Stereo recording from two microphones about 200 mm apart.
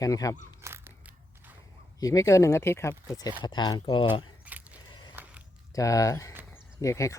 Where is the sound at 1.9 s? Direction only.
15° left (ahead or behind).